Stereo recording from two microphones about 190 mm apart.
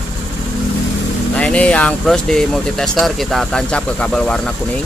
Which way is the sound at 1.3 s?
5° left (ahead or behind).